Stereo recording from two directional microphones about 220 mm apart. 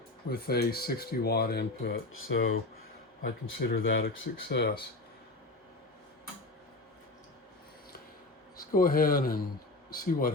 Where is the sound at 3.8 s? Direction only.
55° left (ahead or behind).